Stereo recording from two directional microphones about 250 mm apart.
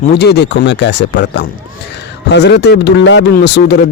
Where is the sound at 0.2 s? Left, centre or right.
Left.